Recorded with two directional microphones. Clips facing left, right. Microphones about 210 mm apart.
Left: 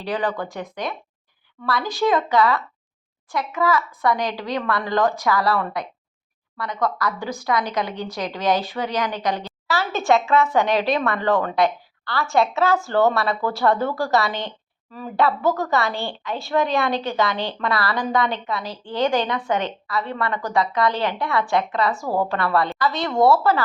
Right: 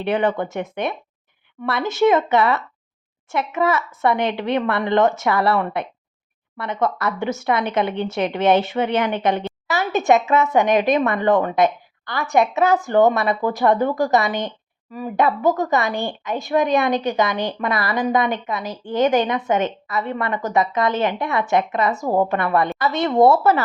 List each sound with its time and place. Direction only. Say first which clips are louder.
0.0 s a woman's voice: right 5 dB; 25° right (ahead or behind)